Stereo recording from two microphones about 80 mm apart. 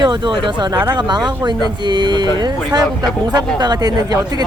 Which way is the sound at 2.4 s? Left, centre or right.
Right.